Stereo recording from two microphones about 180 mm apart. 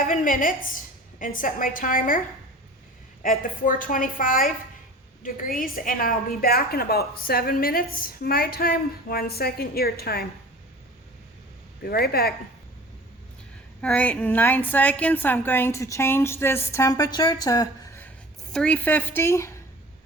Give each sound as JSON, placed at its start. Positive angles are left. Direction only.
{"t": 0.0, "sound": "a woman's voice", "side_deg": 50}
{"t": 3.2, "sound": "a woman's voice", "side_deg": 50}
{"t": 11.8, "sound": "a woman's voice", "side_deg": 60}
{"t": 13.8, "sound": "a woman's voice", "side_deg": 5}